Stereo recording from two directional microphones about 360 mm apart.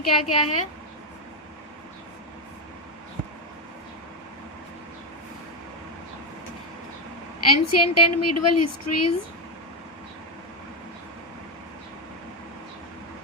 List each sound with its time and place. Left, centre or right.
0.0 s a woman's voice: left
7.5 s a woman's voice: left